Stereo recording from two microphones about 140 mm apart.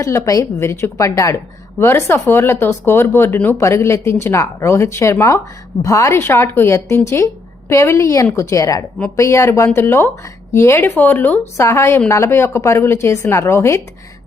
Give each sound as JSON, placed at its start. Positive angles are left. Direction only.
{"t": 0.0, "sound": "speech", "side_deg": 20}